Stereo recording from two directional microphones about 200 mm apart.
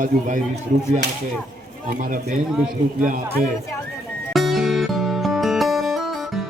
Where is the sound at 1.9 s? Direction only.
45° right (ahead or behind).